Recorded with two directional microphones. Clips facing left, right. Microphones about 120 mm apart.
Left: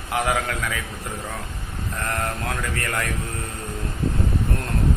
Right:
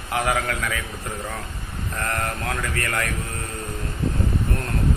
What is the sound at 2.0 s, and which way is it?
A man's voice, 20° left (ahead or behind).